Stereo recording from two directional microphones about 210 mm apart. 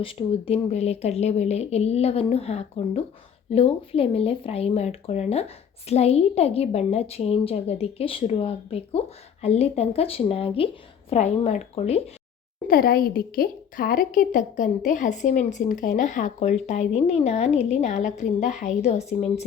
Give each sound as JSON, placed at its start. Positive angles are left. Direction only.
{"t": 0.0, "sound": "speech", "side_deg": 25}
{"t": 12.6, "sound": "a woman's voice", "side_deg": 45}